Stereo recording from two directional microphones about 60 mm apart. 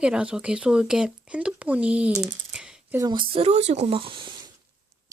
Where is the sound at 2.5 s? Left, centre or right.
Centre.